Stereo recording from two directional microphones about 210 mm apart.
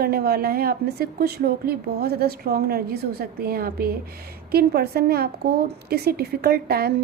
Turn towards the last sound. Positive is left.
turn(degrees=-45)  # may be behind; listen again after turning